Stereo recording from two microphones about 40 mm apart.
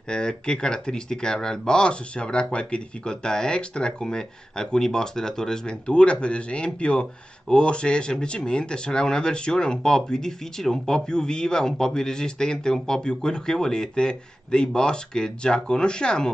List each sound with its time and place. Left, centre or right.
0.1 s speech: left
5.9 s speech: left